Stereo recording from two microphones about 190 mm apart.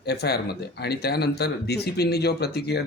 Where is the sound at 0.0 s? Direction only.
60° left (ahead or behind).